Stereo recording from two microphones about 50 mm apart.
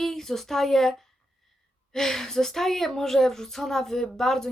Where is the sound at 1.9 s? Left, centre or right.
Centre.